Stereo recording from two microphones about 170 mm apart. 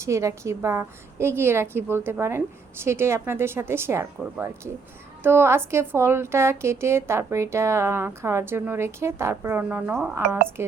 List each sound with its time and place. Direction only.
0.0 s a woman's voice: 15° right (ahead or behind)